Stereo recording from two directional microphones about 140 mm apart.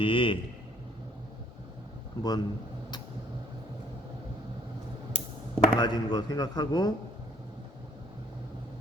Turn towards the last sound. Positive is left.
turn(degrees=30)  # may be behind; listen again after turning